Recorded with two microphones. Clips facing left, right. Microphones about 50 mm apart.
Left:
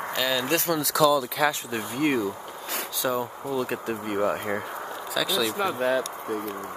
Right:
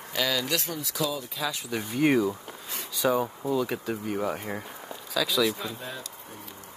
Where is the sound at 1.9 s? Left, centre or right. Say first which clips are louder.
Right 2 dB; centre.